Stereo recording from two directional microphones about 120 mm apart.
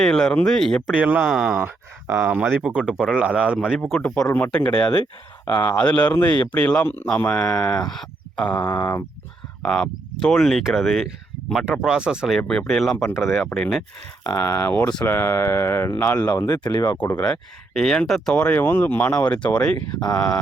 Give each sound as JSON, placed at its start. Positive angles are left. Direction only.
{"t": 0.0, "sound": "speech", "side_deg": 5}
{"t": 0.9, "sound": "speech", "side_deg": -10}
{"t": 4.0, "sound": "speech", "side_deg": 10}
{"t": 4.3, "sound": "a sound", "side_deg": 25}
{"t": 4.5, "sound": "speech", "side_deg": 15}
{"t": 8.6, "sound": "a sound", "side_deg": 25}
{"t": 9.6, "sound": "speech", "side_deg": 5}
{"t": 12.4, "sound": "speech", "side_deg": 5}
{"t": 13.1, "sound": "a sound", "side_deg": 20}
{"t": 13.5, "sound": "speech", "side_deg": 5}
{"t": 14.3, "sound": "a sound", "side_deg": 20}
{"t": 17.0, "sound": "speech", "side_deg": 15}